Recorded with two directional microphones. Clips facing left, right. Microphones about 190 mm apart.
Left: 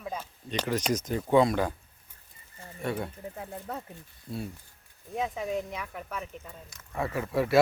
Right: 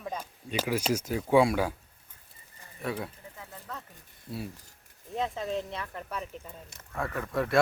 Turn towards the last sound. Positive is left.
turn(degrees=5)  # may be behind; listen again after turning